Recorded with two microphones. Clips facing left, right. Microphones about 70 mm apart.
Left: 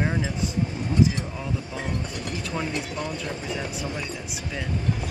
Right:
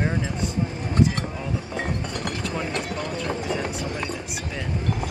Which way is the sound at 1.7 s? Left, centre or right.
Right.